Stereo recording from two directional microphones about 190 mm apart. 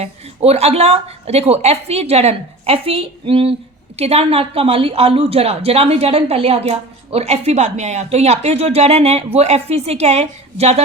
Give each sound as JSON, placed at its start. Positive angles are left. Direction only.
{"t": 0.0, "sound": "a woman's voice", "side_deg": -35}